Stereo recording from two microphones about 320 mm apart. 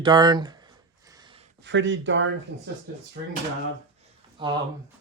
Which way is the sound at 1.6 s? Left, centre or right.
Right.